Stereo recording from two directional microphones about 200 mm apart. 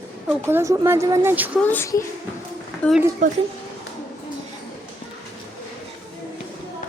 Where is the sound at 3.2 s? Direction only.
40° right (ahead or behind).